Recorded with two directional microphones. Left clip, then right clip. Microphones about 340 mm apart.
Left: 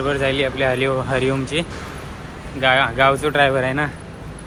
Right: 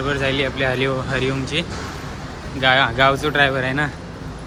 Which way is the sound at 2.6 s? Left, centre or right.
Centre.